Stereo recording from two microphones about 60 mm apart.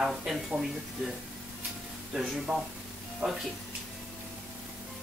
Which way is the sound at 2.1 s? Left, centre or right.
Centre.